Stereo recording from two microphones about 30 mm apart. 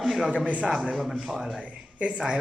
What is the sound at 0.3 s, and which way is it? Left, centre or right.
Speech, right.